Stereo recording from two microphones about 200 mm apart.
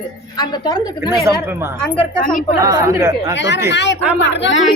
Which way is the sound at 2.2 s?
40° left (ahead or behind).